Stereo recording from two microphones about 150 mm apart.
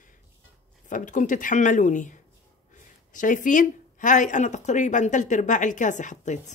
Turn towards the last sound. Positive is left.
turn(degrees=50)  # may be behind; listen again after turning